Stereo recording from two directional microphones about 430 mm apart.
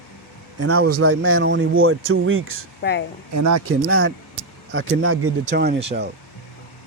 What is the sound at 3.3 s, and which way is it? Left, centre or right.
Speech, right.